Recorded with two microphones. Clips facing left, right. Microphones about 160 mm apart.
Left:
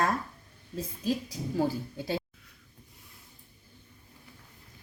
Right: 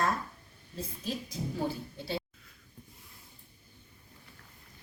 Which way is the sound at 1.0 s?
40° left (ahead or behind).